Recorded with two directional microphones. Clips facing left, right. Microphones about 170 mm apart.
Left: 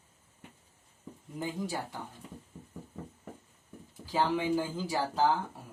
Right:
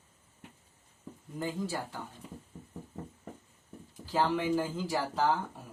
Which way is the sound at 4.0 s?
10° left (ahead or behind).